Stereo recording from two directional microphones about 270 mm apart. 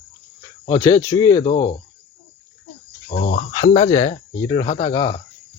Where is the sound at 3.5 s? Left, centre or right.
Centre.